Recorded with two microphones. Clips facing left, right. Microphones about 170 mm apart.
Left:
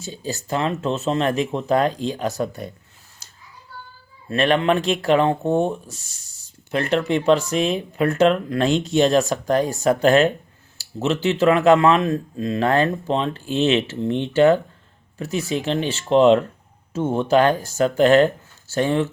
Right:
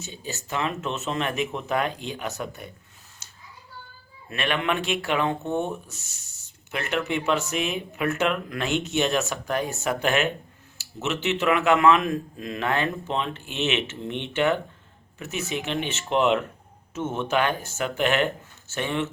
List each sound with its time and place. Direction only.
0.0 s speech: 35° left (ahead or behind)
4.3 s speech: 35° left (ahead or behind)